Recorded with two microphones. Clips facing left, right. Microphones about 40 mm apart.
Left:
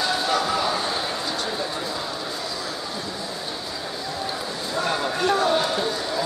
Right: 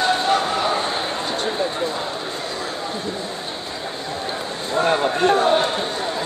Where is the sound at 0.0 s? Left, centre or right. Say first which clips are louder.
Right 4 dB; right.